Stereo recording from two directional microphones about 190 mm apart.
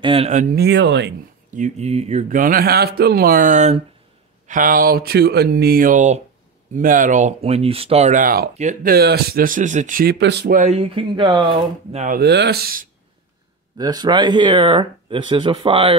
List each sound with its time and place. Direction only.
0.0 s speech: 30° right (ahead or behind)
0.6 s speech: 60° right (ahead or behind)
1.5 s speech: 40° right (ahead or behind)
8.9 s speech: 55° right (ahead or behind)
10.6 s speech: 35° right (ahead or behind)
12.2 s speech: 60° right (ahead or behind)
13.7 s speech: 20° right (ahead or behind)